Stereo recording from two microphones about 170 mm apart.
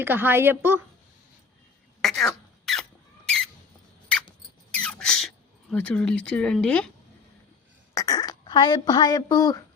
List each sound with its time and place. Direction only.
0.0 s a woman's voice: 10° right (ahead or behind)
2.0 s cough: centre (ahead or behind)
3.2 s a sound: 5° left (ahead or behind)
4.7 s rodents: 5° left (ahead or behind)
5.9 s a woman's voice: 5° left (ahead or behind)
7.9 s speech: 20° left (ahead or behind)